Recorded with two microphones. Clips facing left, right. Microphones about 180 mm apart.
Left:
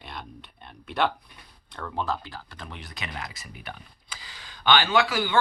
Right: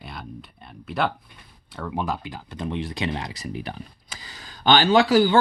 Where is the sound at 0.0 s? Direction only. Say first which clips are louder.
Right 2 dB; 5° right (ahead or behind).